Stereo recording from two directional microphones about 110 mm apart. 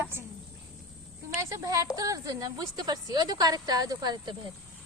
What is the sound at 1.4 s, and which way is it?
A child's voice, 30° right (ahead or behind).